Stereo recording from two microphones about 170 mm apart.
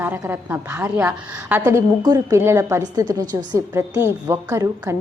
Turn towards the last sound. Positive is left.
turn(degrees=-15)  # may be behind; listen again after turning